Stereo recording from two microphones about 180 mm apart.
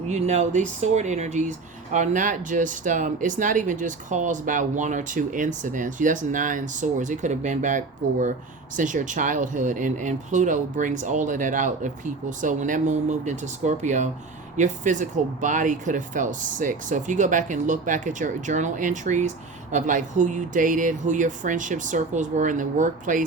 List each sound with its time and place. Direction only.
0.1 s speech: 40° right (ahead or behind)